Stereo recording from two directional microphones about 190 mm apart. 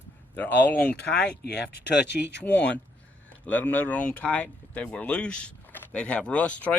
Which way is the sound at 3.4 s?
10° left (ahead or behind).